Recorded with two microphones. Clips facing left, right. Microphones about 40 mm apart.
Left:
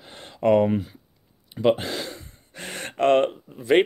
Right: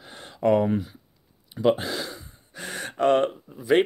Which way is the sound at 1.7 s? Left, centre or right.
Left.